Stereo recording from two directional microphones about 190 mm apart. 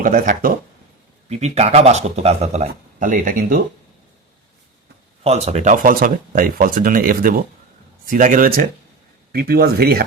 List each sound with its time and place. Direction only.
0.0 s speech: 45° right (ahead or behind)
1.3 s speech: 35° right (ahead or behind)
5.2 s speech: 35° right (ahead or behind); by 10.0 s 55° right (ahead or behind)